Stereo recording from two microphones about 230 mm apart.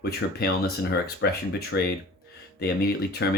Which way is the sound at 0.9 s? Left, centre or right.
Left.